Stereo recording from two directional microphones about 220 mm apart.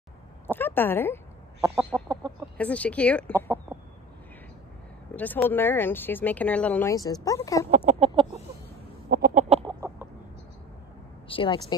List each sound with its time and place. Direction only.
0.5 s speech: 10° left (ahead or behind)
1.9 s chicken: 15° right (ahead or behind)
2.5 s speech: 5° left (ahead or behind)
5.1 s speech: 5° left (ahead or behind)
7.7 s chicken: 30° right (ahead or behind)
9.1 s chicken: 40° right (ahead or behind)
9.8 s chicken: 15° right (ahead or behind)
11.2 s speech: 20° left (ahead or behind)